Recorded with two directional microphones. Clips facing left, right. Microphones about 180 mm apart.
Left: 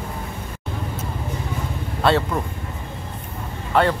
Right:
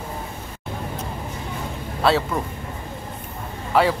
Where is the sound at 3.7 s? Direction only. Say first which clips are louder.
Even; 5° right (ahead or behind).